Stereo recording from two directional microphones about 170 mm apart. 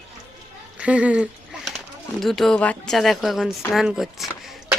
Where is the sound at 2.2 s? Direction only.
Centre (ahead or behind).